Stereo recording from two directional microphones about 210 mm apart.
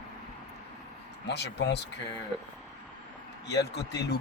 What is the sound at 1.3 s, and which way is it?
Speech, 55° left (ahead or behind).